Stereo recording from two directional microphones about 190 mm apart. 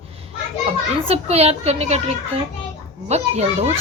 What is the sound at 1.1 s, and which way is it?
A woman's voice, 35° right (ahead or behind).